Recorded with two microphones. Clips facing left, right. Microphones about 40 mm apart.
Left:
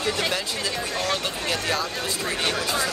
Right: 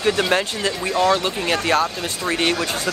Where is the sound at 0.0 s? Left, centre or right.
Right.